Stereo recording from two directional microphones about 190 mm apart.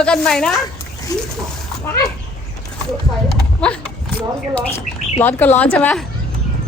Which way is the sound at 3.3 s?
5° left (ahead or behind).